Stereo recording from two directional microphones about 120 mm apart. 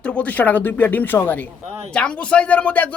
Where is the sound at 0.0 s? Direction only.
10° left (ahead or behind).